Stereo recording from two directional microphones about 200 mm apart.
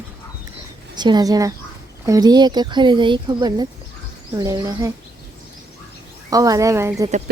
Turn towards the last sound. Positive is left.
turn(degrees=-15)  # may be behind; listen again after turning